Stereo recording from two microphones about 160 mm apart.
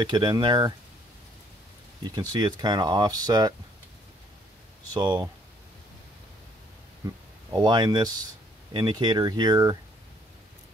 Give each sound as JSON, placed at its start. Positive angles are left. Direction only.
{"t": 0.0, "sound": "speech", "side_deg": -30}
{"t": 2.0, "sound": "speech", "side_deg": -25}
{"t": 4.9, "sound": "speech", "side_deg": -25}
{"t": 7.0, "sound": "speech", "side_deg": -20}